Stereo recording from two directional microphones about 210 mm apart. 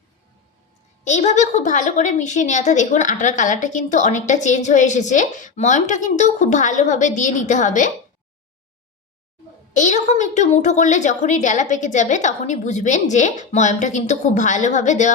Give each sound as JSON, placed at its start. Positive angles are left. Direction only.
{"t": 1.0, "sound": "a woman's voice", "side_deg": 35}
{"t": 9.7, "sound": "a woman's voice", "side_deg": 35}